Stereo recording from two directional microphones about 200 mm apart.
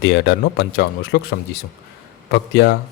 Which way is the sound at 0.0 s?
55° left (ahead or behind).